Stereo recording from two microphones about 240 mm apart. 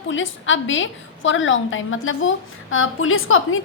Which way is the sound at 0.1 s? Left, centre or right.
Left.